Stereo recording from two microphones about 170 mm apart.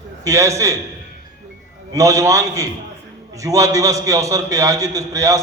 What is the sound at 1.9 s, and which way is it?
A man's voice, 20° right (ahead or behind).